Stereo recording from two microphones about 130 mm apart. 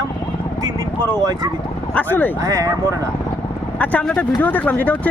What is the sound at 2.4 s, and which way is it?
Speech, 25° right (ahead or behind).